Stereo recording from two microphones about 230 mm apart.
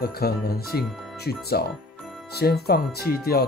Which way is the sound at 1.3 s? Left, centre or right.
Left.